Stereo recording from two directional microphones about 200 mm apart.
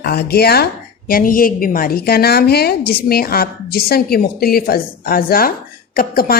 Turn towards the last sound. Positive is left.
turn(degrees=45)  # may be behind; listen again after turning